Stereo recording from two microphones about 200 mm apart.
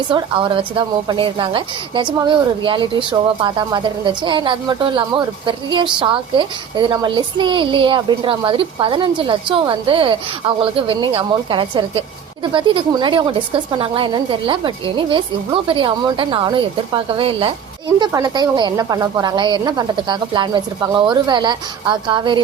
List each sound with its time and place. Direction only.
0.1 s a woman's voice: 25° right (ahead or behind)